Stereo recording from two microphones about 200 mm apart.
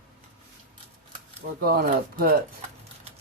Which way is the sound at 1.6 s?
50° right (ahead or behind).